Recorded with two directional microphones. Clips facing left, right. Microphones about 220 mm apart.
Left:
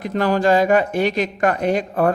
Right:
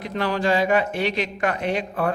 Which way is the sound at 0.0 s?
45° left (ahead or behind).